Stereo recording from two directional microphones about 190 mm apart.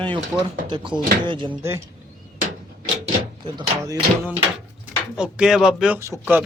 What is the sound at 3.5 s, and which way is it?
Speech, 20° right (ahead or behind).